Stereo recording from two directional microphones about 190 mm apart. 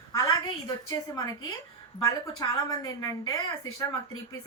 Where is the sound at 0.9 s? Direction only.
20° left (ahead or behind).